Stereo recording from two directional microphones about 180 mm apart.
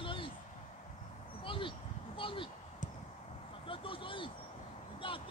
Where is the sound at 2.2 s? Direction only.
30° left (ahead or behind).